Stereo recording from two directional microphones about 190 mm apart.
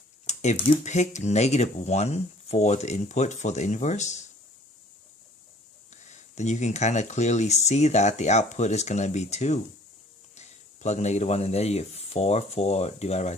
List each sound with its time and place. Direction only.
0.3 s speech: 35° left (ahead or behind)
5.9 s speech: 40° left (ahead or behind)